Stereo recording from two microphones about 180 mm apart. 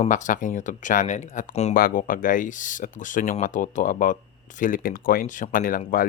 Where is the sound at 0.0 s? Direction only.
45° left (ahead or behind).